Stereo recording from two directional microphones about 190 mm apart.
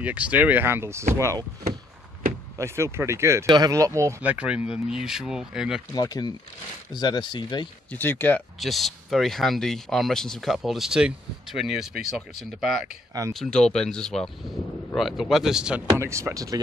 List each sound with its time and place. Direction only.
0.0 s speech: 5° right (ahead or behind)
2.5 s speech: 15° right (ahead or behind)
5.9 s speech: 20° left (ahead or behind)
7.9 s speech: 10° left (ahead or behind)
8.5 s speech: centre (ahead or behind); by 16.6 s 15° right (ahead or behind)